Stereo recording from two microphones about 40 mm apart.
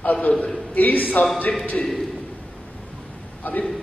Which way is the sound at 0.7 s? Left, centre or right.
Left.